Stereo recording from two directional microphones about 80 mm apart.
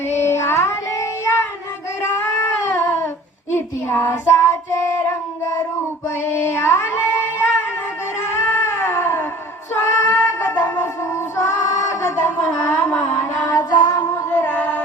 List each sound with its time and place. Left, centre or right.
0.1 s child singing: left
3.5 s a sound: left
4.1 s child singing: left
6.3 s a sound: left
10.0 s music: left
12.8 s music: left
13.4 s child singing: left
14.1 s music: left